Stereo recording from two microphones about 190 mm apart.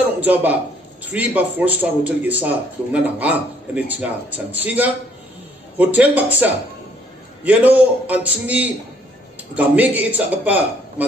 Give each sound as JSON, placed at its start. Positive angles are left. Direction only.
{"t": 0.2, "sound": "a man's voice", "side_deg": -10}